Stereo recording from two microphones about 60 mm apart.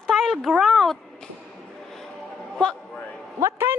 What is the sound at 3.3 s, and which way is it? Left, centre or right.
Speech, right.